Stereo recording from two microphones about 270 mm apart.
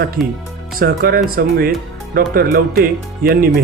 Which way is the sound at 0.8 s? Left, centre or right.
Right.